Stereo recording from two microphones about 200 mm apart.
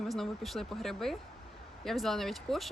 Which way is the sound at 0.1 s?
Centre (ahead or behind).